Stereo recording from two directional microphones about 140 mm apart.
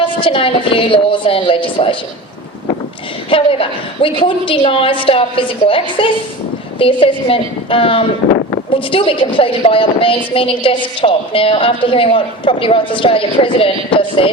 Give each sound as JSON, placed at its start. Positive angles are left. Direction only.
{"t": 0.0, "sound": "a woman's voice", "side_deg": 40}
{"t": 3.2, "sound": "a woman's voice", "side_deg": 40}